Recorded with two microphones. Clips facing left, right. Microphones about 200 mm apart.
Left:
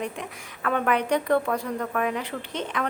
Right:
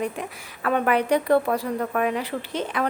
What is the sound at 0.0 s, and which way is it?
A woman's voice, 5° right (ahead or behind).